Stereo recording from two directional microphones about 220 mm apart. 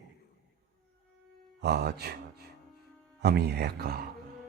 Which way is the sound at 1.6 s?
50° right (ahead or behind).